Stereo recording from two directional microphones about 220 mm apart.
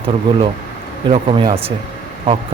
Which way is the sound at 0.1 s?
25° right (ahead or behind).